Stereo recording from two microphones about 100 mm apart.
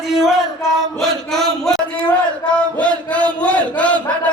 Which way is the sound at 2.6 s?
15° left (ahead or behind).